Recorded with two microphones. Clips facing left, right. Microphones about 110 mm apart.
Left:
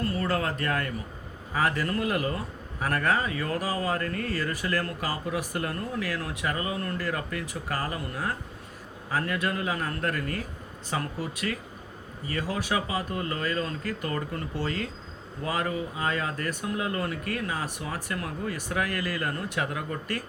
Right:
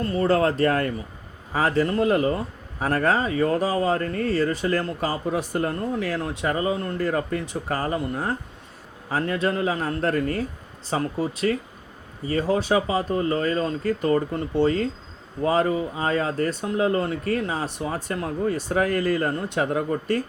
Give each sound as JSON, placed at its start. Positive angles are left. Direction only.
{"t": 0.0, "sound": "speech", "side_deg": -25}